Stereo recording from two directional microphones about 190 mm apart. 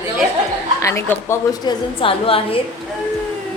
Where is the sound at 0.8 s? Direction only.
15° left (ahead or behind).